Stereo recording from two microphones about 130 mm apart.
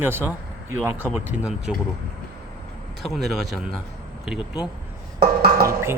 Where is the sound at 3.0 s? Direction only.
Centre (ahead or behind).